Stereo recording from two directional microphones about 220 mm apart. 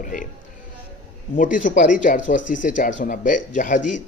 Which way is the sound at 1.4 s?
35° left (ahead or behind).